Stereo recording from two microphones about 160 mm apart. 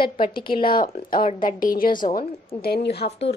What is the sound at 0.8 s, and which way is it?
Speech, 60° left (ahead or behind).